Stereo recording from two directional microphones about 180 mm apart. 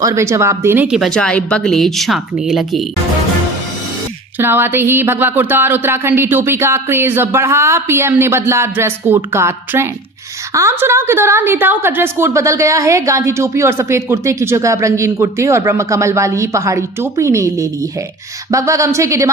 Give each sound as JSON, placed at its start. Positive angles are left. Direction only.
{"t": 0.0, "sound": "speech", "side_deg": -15}
{"t": 4.4, "sound": "a woman's voice", "side_deg": -10}